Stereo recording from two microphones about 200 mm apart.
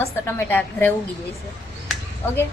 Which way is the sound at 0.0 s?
10° left (ahead or behind).